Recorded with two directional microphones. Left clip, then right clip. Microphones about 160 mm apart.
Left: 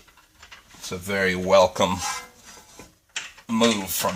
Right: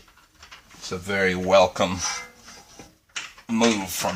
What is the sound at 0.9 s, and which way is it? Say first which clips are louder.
Speech: even; 20° left (ahead or behind).